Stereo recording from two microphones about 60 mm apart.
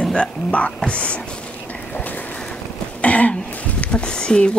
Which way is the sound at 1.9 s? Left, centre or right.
Left.